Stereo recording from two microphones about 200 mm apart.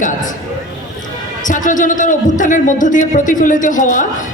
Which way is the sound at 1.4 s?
40° left (ahead or behind).